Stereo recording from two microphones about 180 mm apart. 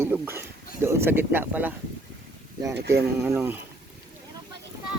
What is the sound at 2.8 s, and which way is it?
Speech, 65° right (ahead or behind).